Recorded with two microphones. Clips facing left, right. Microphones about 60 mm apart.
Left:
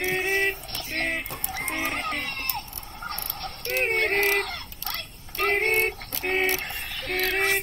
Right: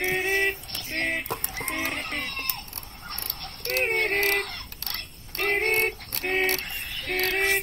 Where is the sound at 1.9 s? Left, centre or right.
Left.